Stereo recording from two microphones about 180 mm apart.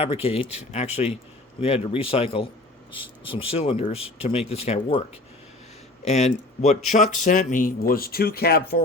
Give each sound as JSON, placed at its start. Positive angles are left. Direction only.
{"t": 0.0, "sound": "speech", "side_deg": 35}
{"t": 6.1, "sound": "speech", "side_deg": 35}